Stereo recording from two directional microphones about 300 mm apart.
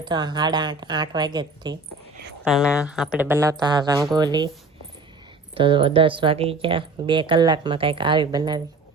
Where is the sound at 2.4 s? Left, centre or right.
Centre.